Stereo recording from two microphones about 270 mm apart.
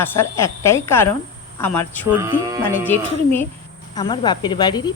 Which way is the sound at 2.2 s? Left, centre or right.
Centre.